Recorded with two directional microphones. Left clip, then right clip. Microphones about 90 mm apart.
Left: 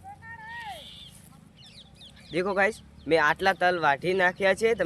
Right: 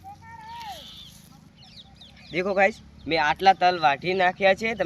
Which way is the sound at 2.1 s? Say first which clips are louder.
Right 3 dB; 30° left (ahead or behind).